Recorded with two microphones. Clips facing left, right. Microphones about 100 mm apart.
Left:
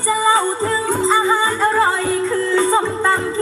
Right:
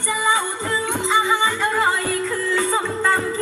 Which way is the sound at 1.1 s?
40° left (ahead or behind).